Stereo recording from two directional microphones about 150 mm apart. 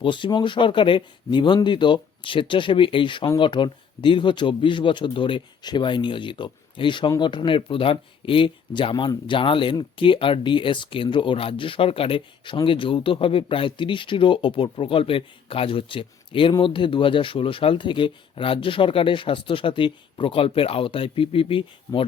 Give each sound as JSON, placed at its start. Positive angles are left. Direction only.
{"t": 0.0, "sound": "speech", "side_deg": 30}